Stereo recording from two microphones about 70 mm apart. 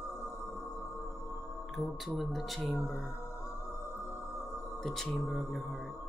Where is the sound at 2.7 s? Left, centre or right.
Left.